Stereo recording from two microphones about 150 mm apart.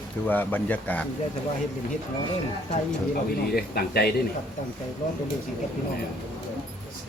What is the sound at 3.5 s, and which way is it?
Speech, 90° left.